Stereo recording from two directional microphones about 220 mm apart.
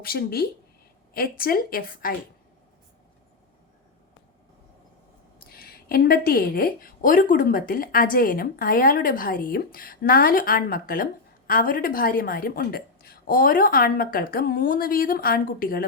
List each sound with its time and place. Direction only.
0.0 s a woman's voice: 45° left (ahead or behind)
5.5 s a woman's voice: 45° left (ahead or behind)